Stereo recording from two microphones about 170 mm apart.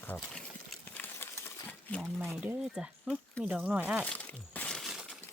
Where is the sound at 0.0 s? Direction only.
5° left (ahead or behind).